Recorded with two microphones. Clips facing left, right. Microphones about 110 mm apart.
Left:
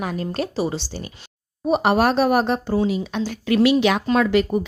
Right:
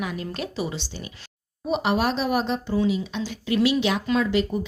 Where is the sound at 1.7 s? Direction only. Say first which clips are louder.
Left 5 dB; 50° left (ahead or behind).